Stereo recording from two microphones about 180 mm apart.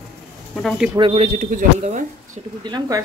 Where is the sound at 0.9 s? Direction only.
30° right (ahead or behind).